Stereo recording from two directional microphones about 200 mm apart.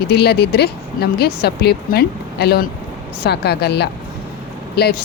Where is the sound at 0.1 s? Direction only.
55° left (ahead or behind).